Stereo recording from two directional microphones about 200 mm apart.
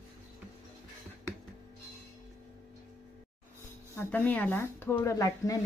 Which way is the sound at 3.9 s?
10° left (ahead or behind).